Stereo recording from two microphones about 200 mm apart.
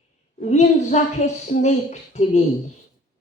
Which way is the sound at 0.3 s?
35° left (ahead or behind).